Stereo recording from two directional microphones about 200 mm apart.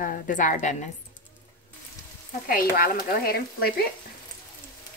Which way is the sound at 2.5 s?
45° left (ahead or behind).